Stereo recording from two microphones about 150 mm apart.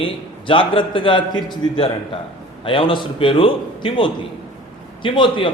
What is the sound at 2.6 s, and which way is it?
A man's voice, 35° left (ahead or behind).